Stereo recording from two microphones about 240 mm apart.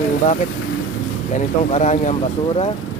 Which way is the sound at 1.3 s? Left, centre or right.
Left.